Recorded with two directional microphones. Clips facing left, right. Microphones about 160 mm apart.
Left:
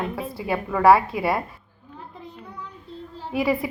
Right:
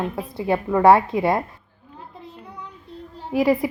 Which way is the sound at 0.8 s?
20° right (ahead or behind).